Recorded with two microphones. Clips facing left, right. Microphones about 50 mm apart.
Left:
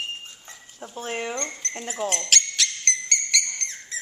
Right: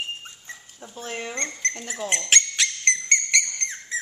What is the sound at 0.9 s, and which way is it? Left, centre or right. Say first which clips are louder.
Speech: left 3 dB; left.